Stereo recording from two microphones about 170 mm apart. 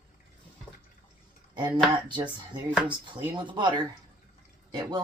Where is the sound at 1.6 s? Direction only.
25° right (ahead or behind).